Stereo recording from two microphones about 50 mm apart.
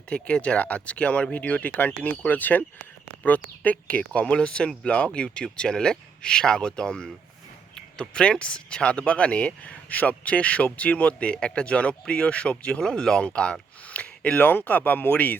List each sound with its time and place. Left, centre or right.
0.1 s speech: left
12.8 s speech: centre; by 15.4 s left